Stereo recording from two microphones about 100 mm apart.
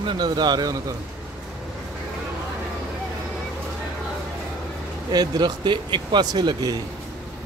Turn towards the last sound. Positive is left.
turn(degrees=-45)  # may be behind; listen again after turning